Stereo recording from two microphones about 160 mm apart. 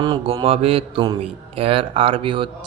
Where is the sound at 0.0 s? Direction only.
30° right (ahead or behind).